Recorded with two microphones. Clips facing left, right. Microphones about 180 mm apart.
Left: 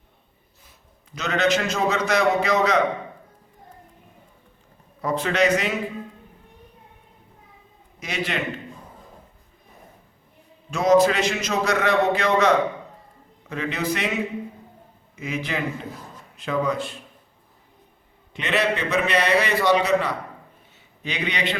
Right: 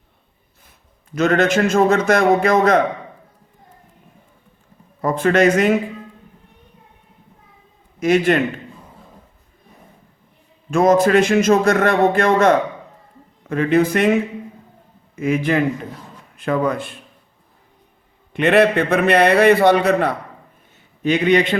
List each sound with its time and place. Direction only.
1.1 s speech: 50° right (ahead or behind)
5.0 s speech: 50° right (ahead or behind)
7.9 s speech: 50° right (ahead or behind)
10.7 s a man's voice: 50° right (ahead or behind)
18.3 s a man's voice: 55° right (ahead or behind)